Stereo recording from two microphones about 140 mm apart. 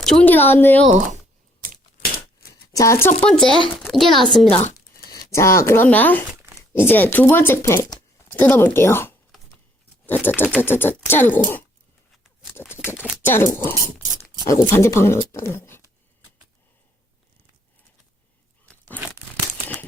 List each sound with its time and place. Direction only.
0.0 s speech: 5° left (ahead or behind)
0.9 s speech: 55° right (ahead or behind)
2.0 s a sound: 90° left
2.7 s speech: 20° left (ahead or behind)
3.2 s a woman's voice: 5° left (ahead or behind)
5.3 s speech: 20° left (ahead or behind)
12.1 s a sound: centre (ahead or behind)
12.5 s a sound: 15° left (ahead or behind)
13.2 s speech: 15° left (ahead or behind)
18.6 s crunch: 10° left (ahead or behind)